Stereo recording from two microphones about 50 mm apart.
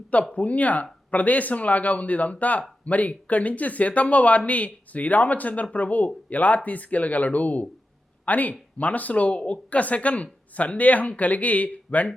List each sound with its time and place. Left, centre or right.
0.3 s speech: left